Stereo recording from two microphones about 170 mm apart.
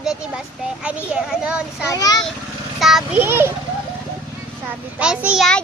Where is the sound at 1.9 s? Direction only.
20° left (ahead or behind).